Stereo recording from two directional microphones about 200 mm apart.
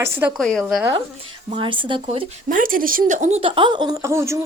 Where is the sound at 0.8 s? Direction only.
20° right (ahead or behind).